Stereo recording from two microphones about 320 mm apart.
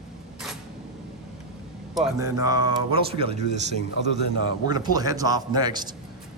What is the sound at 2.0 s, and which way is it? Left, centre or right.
Speech, centre.